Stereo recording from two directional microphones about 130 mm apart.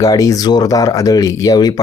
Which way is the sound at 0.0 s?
25° left (ahead or behind).